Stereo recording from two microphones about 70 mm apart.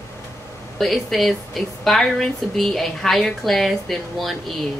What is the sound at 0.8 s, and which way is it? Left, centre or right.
Speech, centre.